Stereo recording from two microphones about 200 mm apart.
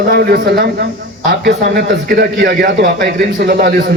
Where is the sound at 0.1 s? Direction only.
50° right (ahead or behind).